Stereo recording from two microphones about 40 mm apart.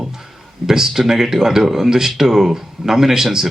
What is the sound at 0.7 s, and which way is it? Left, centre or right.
A man's voice, centre.